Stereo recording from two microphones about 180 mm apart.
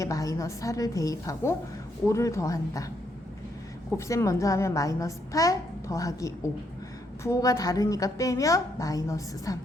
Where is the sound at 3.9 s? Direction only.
15° left (ahead or behind).